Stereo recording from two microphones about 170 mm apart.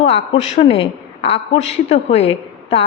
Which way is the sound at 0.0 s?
35° left (ahead or behind).